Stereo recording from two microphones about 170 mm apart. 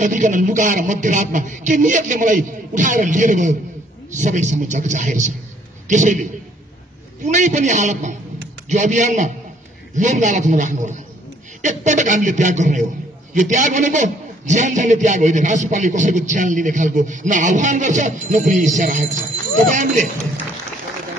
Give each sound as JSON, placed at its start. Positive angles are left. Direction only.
{"t": 0.0, "sound": "a man's voice", "side_deg": -45}
{"t": 7.2, "sound": "a man's voice", "side_deg": -45}